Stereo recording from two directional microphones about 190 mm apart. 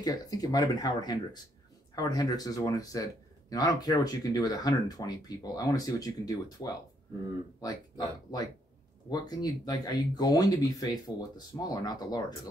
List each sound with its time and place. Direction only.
0.0 s speech: 20° left (ahead or behind)